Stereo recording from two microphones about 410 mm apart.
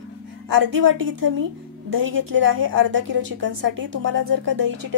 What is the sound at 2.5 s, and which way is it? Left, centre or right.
A woman's voice, right.